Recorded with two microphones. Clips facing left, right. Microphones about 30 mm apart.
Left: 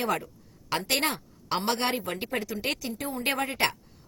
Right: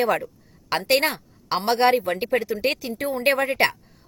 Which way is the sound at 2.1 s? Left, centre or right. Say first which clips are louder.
Right 8 dB; right.